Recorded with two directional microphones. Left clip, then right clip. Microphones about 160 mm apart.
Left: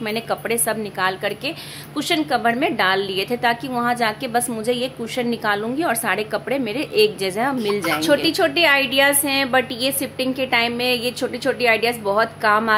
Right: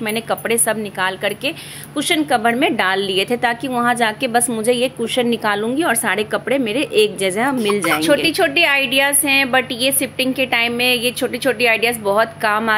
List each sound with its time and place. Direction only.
0.1 s a woman's voice: 15° right (ahead or behind)
8.0 s a woman's voice: 10° right (ahead or behind)